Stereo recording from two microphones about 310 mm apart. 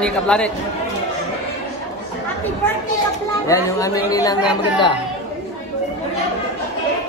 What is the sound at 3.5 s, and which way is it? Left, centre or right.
Speech, centre.